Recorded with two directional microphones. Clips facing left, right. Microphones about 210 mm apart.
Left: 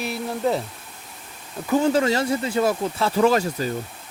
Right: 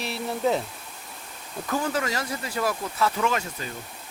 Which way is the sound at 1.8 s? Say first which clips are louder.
Left 10 dB; 30° left (ahead or behind).